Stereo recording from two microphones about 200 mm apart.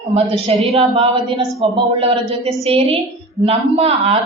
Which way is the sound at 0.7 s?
25° right (ahead or behind).